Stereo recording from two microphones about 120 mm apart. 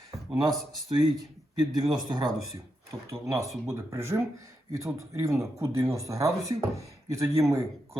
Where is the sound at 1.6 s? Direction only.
30° right (ahead or behind).